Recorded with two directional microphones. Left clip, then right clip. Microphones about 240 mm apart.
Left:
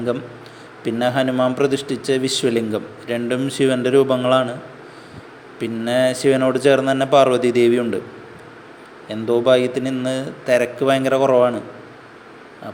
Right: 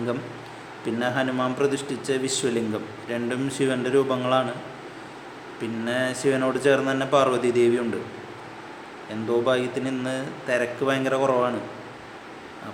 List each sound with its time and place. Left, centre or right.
0.9 s a man's voice: left
5.5 s a man's voice: left
9.0 s a man's voice: left